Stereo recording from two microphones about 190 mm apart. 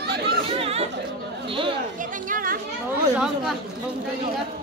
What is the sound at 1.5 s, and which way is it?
Speech, 25° right (ahead or behind).